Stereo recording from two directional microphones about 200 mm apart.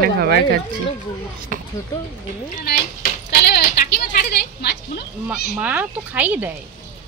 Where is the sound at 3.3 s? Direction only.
55° left (ahead or behind).